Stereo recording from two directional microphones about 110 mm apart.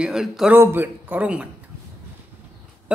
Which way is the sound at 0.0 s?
5° right (ahead or behind).